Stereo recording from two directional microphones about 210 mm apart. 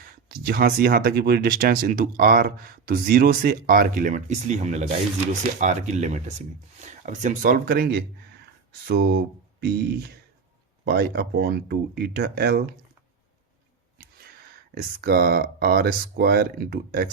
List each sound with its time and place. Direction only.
0.3 s speech: 45° right (ahead or behind)
14.8 s speech: 45° right (ahead or behind)